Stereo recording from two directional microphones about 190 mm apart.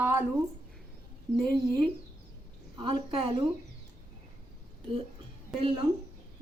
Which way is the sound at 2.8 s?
25° right (ahead or behind).